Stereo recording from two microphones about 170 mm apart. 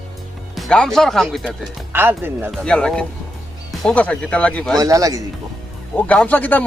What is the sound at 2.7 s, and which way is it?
Speech, 5° left (ahead or behind).